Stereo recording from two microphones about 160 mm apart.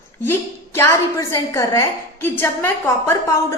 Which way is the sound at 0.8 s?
15° left (ahead or behind).